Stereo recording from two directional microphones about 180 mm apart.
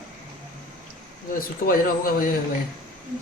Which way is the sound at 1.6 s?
50° left (ahead or behind).